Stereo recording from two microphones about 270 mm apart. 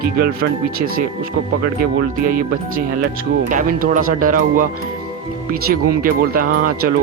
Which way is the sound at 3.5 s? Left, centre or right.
Right.